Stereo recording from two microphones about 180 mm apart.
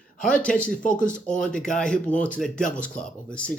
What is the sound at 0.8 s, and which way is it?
Speech, 45° left (ahead or behind).